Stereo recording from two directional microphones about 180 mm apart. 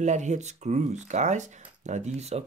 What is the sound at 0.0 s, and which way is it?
Speech, 40° right (ahead or behind).